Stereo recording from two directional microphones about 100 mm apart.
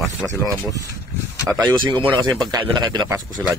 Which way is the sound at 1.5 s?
50° right (ahead or behind).